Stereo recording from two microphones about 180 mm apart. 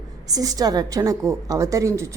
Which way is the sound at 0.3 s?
20° right (ahead or behind).